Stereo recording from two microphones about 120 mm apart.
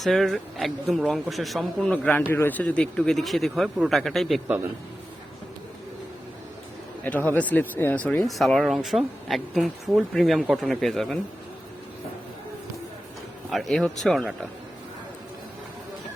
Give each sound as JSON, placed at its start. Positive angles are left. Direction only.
{"t": 0.0, "sound": "speech", "side_deg": 0}
{"t": 1.9, "sound": "speech", "side_deg": 15}
{"t": 7.0, "sound": "speech", "side_deg": 15}
{"t": 8.3, "sound": "speech", "side_deg": 0}
{"t": 13.5, "sound": "speech", "side_deg": 0}